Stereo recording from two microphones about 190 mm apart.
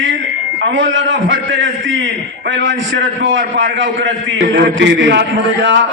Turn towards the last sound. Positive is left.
turn(degrees=-70)  # may be behind; listen again after turning